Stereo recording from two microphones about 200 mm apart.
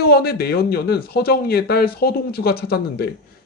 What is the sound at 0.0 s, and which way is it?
A man's voice, 50° left (ahead or behind).